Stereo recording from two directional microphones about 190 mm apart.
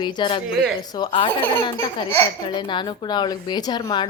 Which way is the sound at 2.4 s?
25° left (ahead or behind).